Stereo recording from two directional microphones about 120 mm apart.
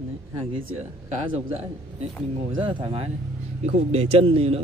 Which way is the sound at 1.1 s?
65° right (ahead or behind).